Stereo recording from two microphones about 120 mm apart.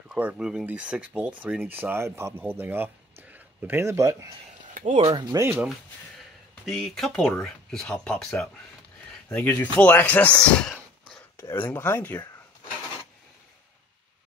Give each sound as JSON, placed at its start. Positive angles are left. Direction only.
{"t": 0.2, "sound": "speech", "side_deg": -10}
{"t": 4.9, "sound": "speech", "side_deg": -45}
{"t": 5.6, "sound": "speech", "side_deg": 0}
{"t": 9.3, "sound": "speech", "side_deg": 15}
{"t": 11.3, "sound": "speech", "side_deg": 20}